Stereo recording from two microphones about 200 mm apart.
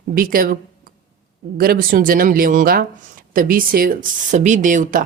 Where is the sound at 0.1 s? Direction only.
45° right (ahead or behind).